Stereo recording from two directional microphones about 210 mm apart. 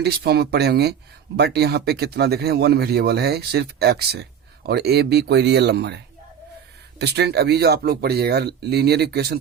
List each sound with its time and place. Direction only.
0.0 s speech: 50° right (ahead or behind)
7.0 s speech: 50° right (ahead or behind)